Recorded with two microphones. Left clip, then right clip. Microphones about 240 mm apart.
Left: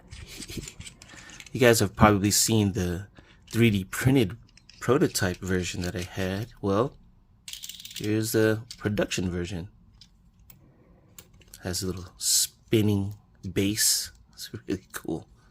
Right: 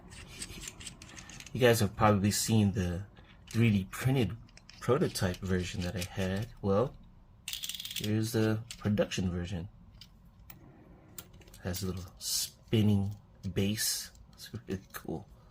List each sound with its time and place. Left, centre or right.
1.5 s speech: left
8.0 s speech: left
11.5 s speech: left